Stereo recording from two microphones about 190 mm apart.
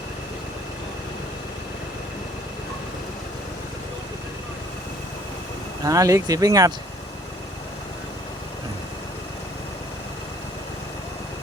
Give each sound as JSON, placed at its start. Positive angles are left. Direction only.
{"t": 5.8, "sound": "speech", "side_deg": -15}